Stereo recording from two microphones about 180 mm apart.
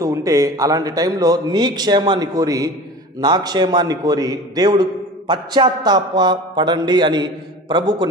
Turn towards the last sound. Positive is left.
turn(degrees=-25)  # may be behind; listen again after turning